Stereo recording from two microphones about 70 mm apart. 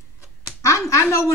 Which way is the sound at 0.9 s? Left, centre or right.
Left.